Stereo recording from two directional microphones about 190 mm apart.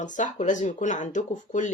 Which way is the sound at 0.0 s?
40° left (ahead or behind).